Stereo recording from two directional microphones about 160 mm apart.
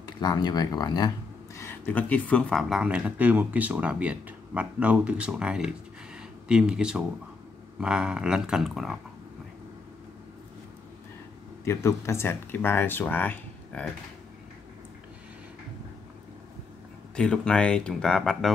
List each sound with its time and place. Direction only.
0.0 s speech: 25° left (ahead or behind); by 2.6 s 10° left (ahead or behind)
2.7 s speech: 5° right (ahead or behind)
6.1 s a sound: 5° right (ahead or behind)
7.8 s speech: 5° right (ahead or behind)
11.6 s speech: 15° left (ahead or behind)
17.1 s speech: 5° left (ahead or behind)